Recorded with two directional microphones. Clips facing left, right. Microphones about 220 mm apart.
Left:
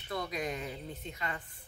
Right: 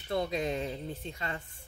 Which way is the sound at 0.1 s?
25° right (ahead or behind).